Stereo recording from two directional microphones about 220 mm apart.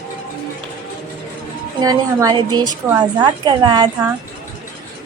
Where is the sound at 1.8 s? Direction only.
15° right (ahead or behind).